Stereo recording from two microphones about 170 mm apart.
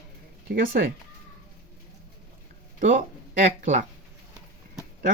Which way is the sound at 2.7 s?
50° right (ahead or behind).